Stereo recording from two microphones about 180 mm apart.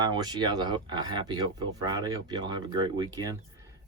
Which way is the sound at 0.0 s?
25° right (ahead or behind).